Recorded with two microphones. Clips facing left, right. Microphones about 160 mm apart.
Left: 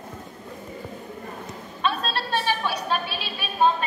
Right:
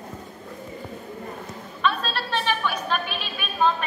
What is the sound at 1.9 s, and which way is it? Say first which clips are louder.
A woman's voice: right 1 dB; 35° left (ahead or behind).